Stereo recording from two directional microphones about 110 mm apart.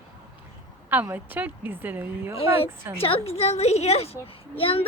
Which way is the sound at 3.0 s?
65° left (ahead or behind).